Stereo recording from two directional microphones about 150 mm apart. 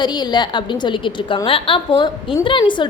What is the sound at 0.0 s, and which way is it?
A woman's voice, 30° left (ahead or behind).